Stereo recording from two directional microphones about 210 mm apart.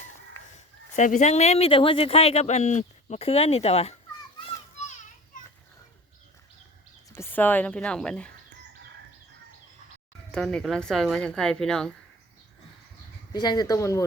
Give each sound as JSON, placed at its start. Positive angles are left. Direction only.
{"t": 0.4, "sound": "a sound", "side_deg": 10}
{"t": 0.9, "sound": "speech", "side_deg": 35}
{"t": 4.9, "sound": "children playing", "side_deg": 35}
{"t": 7.2, "sound": "speech", "side_deg": 10}
{"t": 10.3, "sound": "speech", "side_deg": 5}
{"t": 13.3, "sound": "speech", "side_deg": 20}